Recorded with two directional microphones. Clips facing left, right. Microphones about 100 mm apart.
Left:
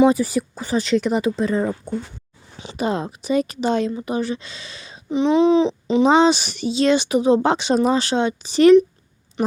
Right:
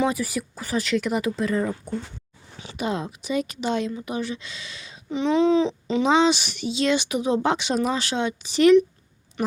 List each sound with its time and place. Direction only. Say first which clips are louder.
0.1 s speech: left 7 dB; 30° left (ahead or behind)
2.7 s a woman's voice: left 4 dB; 40° left (ahead or behind)
5.1 s speech: left 4 dB; 20° left (ahead or behind)
6.1 s a woman's voice: left 3 dB; 40° left (ahead or behind)